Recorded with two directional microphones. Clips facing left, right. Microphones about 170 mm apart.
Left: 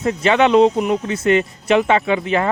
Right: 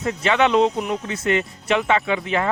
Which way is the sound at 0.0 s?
25° left (ahead or behind).